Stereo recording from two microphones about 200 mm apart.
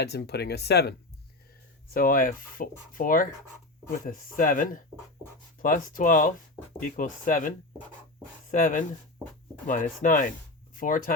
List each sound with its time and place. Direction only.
0.0 s speech: 55° left (ahead or behind)